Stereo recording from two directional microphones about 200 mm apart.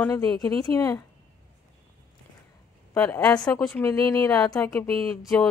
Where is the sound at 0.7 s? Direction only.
20° left (ahead or behind).